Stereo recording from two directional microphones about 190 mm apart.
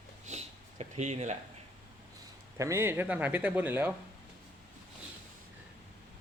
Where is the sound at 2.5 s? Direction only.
15° right (ahead or behind).